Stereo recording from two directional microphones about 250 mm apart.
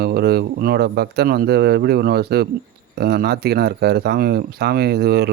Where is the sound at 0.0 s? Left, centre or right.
Right.